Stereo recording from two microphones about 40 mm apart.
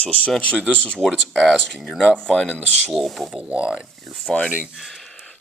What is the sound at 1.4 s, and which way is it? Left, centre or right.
Speech, centre.